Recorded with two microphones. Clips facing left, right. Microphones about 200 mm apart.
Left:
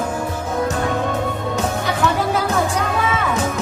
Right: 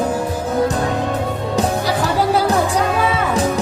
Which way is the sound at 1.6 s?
35° right (ahead or behind).